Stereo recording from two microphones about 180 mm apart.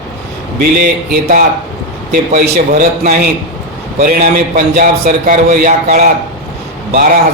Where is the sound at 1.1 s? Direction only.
50° right (ahead or behind).